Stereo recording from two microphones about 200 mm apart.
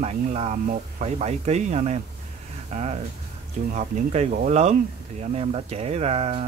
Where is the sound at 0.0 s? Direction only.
35° right (ahead or behind).